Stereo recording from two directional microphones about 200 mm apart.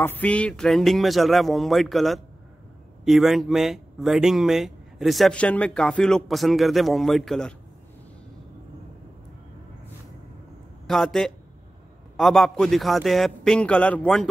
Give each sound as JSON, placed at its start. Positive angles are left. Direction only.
{"t": 0.0, "sound": "speech", "side_deg": 10}
{"t": 10.9, "sound": "speech", "side_deg": 0}